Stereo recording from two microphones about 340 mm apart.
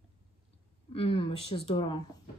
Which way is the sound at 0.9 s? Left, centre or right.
Centre.